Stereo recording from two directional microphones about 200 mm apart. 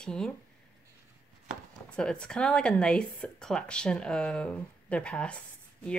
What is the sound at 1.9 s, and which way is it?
A woman's voice, 5° left (ahead or behind).